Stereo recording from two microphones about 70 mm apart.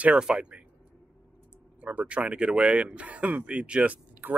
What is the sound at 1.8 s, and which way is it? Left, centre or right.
Speech, right.